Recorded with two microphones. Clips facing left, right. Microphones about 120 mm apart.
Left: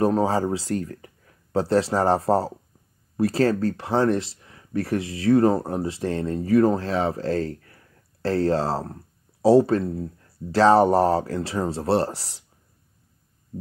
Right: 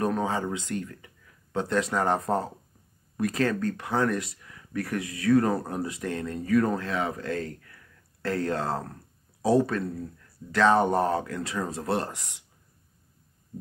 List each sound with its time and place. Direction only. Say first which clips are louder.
0.0 s speech: left 6 dB; 35° left (ahead or behind)